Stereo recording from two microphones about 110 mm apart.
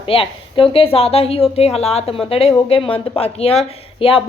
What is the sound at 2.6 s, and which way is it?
Speech, 55° left (ahead or behind).